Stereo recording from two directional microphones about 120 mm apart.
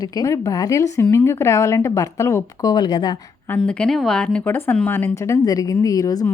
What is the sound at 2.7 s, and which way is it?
Speech, 35° left (ahead or behind).